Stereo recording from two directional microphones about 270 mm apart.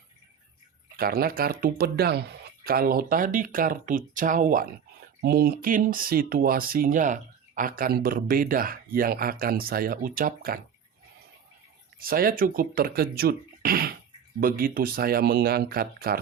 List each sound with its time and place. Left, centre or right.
0.9 s speech: right
11.9 s speech: right